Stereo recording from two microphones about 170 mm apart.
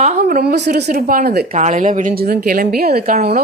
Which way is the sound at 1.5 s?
45° right (ahead or behind).